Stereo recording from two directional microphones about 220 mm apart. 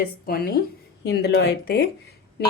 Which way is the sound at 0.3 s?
45° left (ahead or behind).